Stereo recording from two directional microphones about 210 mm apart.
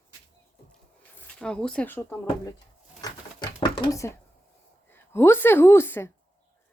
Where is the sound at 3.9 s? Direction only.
15° left (ahead or behind).